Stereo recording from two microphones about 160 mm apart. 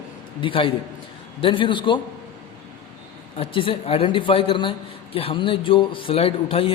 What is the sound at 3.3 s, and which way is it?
Speech, 35° left (ahead or behind).